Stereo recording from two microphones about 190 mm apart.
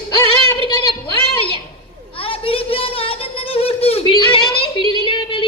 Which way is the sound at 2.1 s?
30° left (ahead or behind).